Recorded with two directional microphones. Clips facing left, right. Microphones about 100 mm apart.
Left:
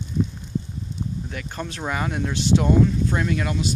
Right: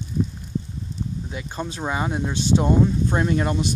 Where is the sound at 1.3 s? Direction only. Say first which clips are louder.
Right 1 dB; 20° right (ahead or behind).